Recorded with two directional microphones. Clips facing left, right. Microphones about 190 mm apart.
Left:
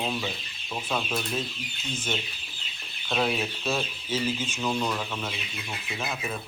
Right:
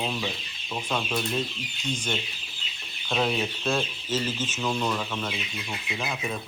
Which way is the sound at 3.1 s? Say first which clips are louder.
Right 1 dB; centre (ahead or behind).